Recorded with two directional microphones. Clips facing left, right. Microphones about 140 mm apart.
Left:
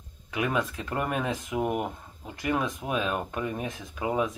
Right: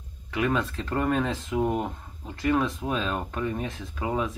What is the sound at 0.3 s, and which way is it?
Speech, 15° left (ahead or behind).